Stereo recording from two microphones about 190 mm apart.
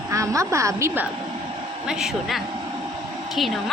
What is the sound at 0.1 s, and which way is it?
Speech, 15° right (ahead or behind).